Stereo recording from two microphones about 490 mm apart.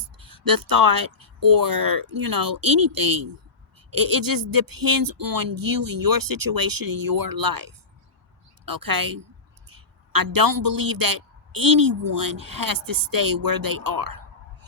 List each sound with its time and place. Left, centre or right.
0.2 s a man's voice: right